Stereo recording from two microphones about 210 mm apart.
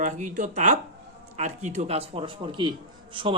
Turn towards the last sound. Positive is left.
turn(degrees=-25)  # may be behind; listen again after turning